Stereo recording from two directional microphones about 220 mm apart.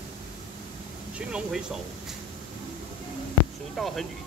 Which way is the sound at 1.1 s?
5° right (ahead or behind).